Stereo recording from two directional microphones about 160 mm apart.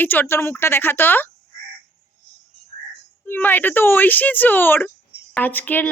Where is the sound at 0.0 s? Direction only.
10° left (ahead or behind).